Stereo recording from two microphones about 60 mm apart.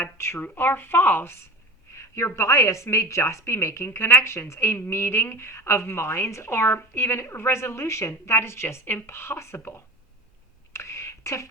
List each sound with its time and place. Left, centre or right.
0.0 s speech: left
2.0 s a woman's voice: left
10.7 s a sound: left